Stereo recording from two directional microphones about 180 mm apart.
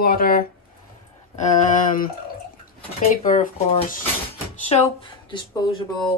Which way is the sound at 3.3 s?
50° left (ahead or behind).